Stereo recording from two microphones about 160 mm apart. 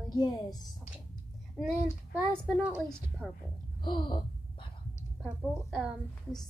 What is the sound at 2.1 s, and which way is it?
Speech, 10° right (ahead or behind).